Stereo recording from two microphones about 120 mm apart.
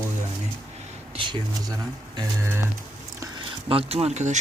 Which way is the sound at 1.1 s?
40° right (ahead or behind).